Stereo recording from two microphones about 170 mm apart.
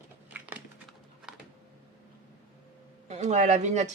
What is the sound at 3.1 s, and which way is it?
Speech, 40° right (ahead or behind).